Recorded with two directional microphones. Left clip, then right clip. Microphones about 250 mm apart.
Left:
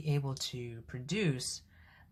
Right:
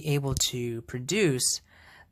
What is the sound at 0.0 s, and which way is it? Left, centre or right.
Speech, right.